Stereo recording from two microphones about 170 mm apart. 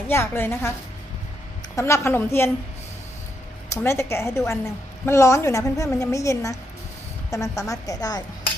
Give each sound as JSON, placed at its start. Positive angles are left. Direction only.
{"t": 0.1, "sound": "a woman's voice", "side_deg": 15}
{"t": 1.7, "sound": "a woman's voice", "side_deg": 15}
{"t": 3.8, "sound": "a woman's voice", "side_deg": 15}